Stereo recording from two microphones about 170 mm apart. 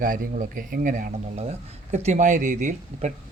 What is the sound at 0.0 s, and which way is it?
Speech, 50° right (ahead or behind).